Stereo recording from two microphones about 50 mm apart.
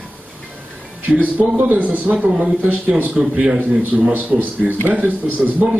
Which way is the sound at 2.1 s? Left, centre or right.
Right.